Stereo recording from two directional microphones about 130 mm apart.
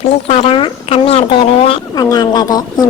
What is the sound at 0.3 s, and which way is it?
Speech, 50° left (ahead or behind).